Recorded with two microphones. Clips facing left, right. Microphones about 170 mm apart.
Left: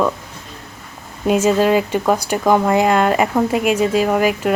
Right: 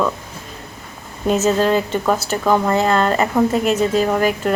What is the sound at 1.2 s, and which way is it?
A woman's voice, 10° left (ahead or behind).